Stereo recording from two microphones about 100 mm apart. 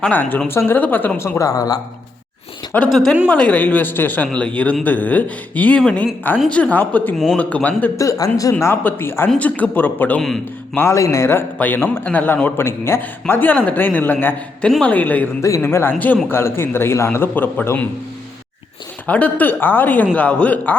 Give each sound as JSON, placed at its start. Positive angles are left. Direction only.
{"t": 0.0, "sound": "a man's voice", "side_deg": 20}
{"t": 1.4, "sound": "speech", "side_deg": 35}
{"t": 2.9, "sound": "speech", "side_deg": 5}
{"t": 7.9, "sound": "speech", "side_deg": 30}
{"t": 8.5, "sound": "a man's voice", "side_deg": 20}
{"t": 10.2, "sound": "speech", "side_deg": 5}
{"t": 10.8, "sound": "a man's voice", "side_deg": 30}
{"t": 15.4, "sound": "a man's voice", "side_deg": 30}
{"t": 19.0, "sound": "speech", "side_deg": 15}